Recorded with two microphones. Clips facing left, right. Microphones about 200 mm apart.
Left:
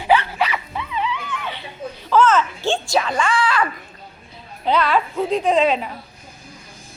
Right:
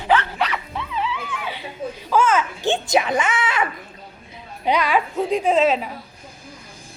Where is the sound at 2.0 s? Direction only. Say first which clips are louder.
Left 3 dB; 10° right (ahead or behind).